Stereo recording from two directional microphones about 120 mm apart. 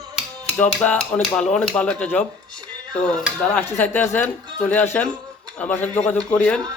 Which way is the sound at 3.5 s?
15° left (ahead or behind).